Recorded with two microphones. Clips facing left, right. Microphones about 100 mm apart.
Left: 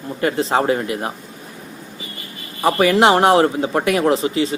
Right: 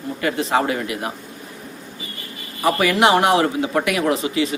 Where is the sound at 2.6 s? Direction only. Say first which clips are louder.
Left 3 dB; 30° left (ahead or behind).